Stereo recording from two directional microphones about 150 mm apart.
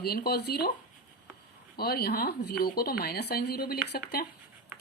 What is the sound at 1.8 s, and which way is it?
Speech, 90° left.